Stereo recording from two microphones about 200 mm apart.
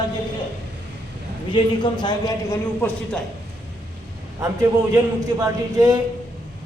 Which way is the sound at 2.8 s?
10° left (ahead or behind).